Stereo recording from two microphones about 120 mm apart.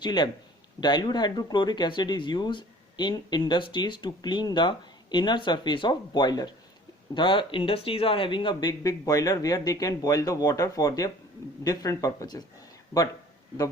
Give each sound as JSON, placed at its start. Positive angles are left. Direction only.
{"t": 0.0, "sound": "speech", "side_deg": 40}
{"t": 8.8, "sound": "speech", "side_deg": 30}